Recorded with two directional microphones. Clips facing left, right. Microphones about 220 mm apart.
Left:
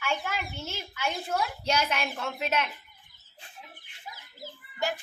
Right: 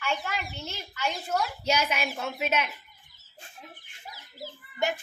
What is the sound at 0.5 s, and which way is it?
Speech, 10° left (ahead or behind).